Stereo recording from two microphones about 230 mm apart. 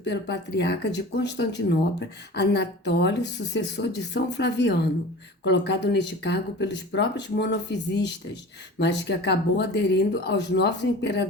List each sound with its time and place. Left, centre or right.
0.0 s speech: left